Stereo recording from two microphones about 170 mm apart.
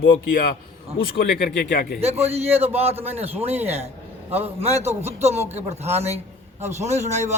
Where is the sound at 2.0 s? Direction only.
40° right (ahead or behind).